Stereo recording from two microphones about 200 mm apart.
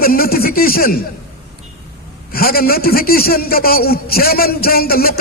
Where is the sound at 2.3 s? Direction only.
50° left (ahead or behind).